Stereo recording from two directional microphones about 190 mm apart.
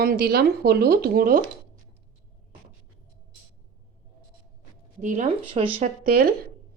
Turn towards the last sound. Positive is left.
turn(degrees=-55)  # may be behind; listen again after turning